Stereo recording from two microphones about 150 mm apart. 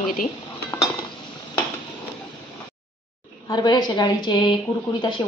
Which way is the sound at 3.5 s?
30° left (ahead or behind).